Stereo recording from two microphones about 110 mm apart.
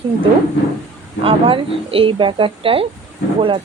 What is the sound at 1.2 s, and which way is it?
A woman's voice, 55° right (ahead or behind).